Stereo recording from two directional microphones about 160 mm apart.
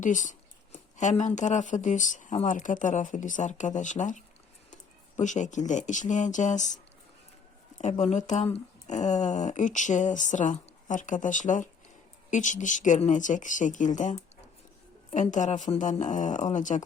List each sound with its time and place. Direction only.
0.0 s speech: 50° left (ahead or behind)
7.8 s speech: 45° left (ahead or behind)